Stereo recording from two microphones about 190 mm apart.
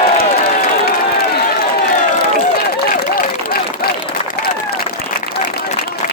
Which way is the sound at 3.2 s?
50° left (ahead or behind).